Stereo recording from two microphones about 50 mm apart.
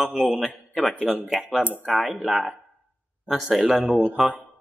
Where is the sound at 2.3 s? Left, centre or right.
Centre.